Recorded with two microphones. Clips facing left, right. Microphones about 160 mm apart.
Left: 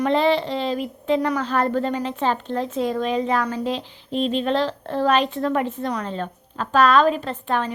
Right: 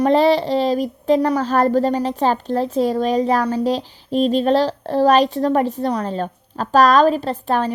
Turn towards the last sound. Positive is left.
turn(degrees=-35)  # may be behind; listen again after turning